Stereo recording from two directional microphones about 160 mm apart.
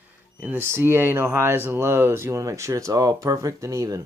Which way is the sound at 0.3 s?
10° right (ahead or behind).